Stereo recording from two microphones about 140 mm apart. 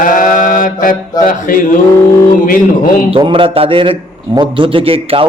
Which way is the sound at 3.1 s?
35° right (ahead or behind).